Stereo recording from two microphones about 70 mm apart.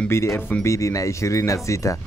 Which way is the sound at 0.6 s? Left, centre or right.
Left.